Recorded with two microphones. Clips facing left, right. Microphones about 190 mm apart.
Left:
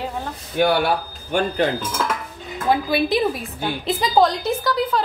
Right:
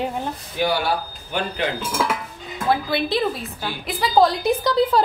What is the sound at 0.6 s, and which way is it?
Speech, 60° left (ahead or behind).